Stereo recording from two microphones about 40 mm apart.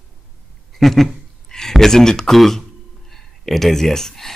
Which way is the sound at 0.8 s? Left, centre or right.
Centre.